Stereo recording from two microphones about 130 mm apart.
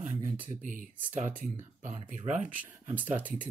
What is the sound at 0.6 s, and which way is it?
Speech, 85° right.